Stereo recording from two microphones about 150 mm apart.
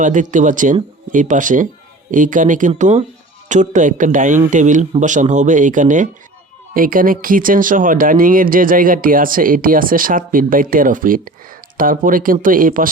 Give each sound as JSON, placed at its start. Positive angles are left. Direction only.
{"t": 0.0, "sound": "speech", "side_deg": -60}